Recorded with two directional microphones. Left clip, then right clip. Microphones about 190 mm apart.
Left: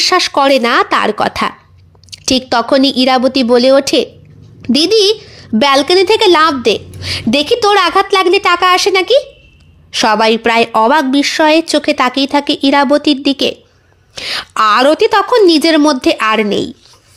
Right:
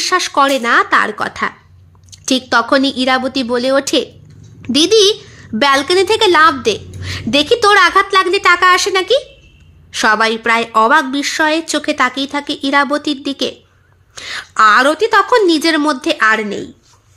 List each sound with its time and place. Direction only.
0.0 s a woman's voice: 25° left (ahead or behind)